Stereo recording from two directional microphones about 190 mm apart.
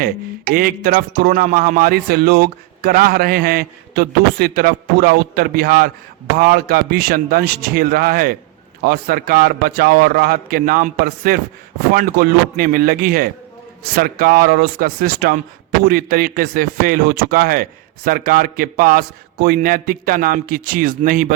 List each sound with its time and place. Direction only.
0.0 s speech: 50° right (ahead or behind)